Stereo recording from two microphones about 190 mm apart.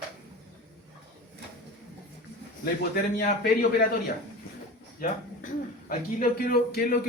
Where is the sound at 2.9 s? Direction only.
50° left (ahead or behind).